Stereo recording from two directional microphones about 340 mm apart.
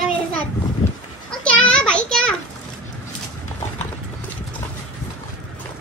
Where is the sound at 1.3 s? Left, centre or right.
Centre.